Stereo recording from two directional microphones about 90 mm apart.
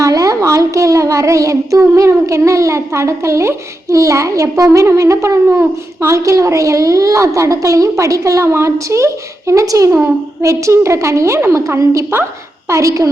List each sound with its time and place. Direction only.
0.0 s a child's voice: 40° right (ahead or behind)